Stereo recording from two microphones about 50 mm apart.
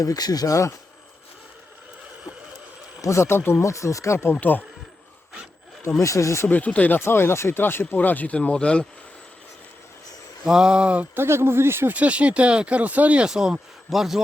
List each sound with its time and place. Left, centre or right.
0.4 s speech: left
3.0 s speech: left
3.6 s speech: left
4.4 s speech: left
6.0 s speech: left
6.5 s speech: left
7.0 s speech: left
7.6 s speech: left
7.9 s speech: left
8.4 s speech: left
10.4 s speech: centre
11.1 s speech: right
11.9 s speech: right
13.2 s speech: centre